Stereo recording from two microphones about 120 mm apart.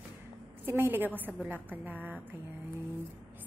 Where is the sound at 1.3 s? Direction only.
5° left (ahead or behind).